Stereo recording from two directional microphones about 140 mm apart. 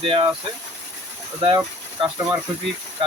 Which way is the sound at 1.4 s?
35° right (ahead or behind).